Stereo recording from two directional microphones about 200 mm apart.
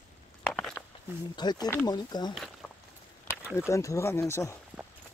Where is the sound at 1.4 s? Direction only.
20° left (ahead or behind).